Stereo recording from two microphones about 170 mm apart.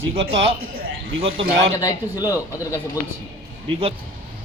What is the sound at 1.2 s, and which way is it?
Speech, 35° right (ahead or behind).